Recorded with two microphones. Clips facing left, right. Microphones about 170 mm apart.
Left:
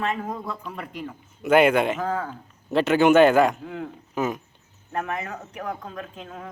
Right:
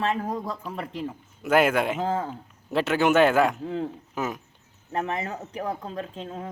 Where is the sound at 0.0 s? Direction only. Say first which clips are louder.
Right 1 dB; 35° right (ahead or behind).